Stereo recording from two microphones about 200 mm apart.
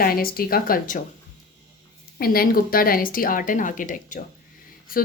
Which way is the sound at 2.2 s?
50° left (ahead or behind).